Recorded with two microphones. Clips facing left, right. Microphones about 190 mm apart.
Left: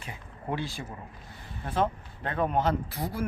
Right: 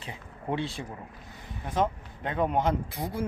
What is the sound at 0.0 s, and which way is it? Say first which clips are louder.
Speech: right 1 dB; 25° right (ahead or behind).